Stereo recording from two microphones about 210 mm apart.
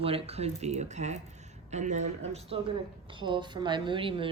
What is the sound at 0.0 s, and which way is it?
A woman's voice, 25° right (ahead or behind).